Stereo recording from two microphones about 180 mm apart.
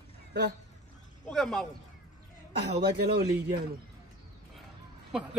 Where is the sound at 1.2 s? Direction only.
Centre (ahead or behind).